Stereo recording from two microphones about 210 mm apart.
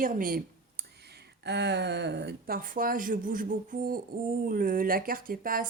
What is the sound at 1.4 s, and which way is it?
Speech, 55° right (ahead or behind).